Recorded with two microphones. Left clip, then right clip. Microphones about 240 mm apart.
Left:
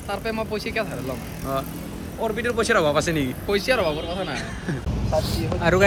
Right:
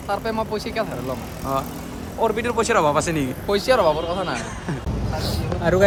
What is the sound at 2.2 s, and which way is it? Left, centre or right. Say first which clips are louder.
A man's voice: right 3 dB; centre.